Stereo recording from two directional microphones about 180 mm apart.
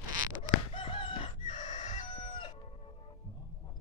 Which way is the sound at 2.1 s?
25° left (ahead or behind).